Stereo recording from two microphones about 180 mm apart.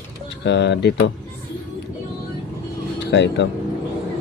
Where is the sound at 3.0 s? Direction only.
75° left (ahead or behind).